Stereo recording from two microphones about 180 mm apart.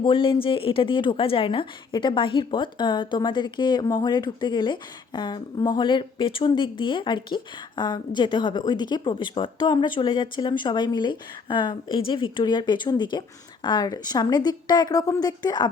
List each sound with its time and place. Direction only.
0.0 s a woman's voice: 30° left (ahead or behind)